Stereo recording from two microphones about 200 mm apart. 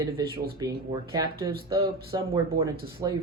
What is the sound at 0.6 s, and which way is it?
Speech, 20° right (ahead or behind).